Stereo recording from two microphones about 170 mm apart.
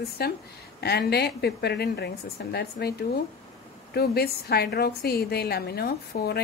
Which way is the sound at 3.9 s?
65° left (ahead or behind).